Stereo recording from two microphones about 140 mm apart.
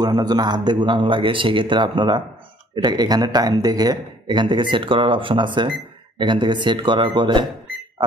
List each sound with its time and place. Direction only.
0.0 s a man's voice: 30° right (ahead or behind)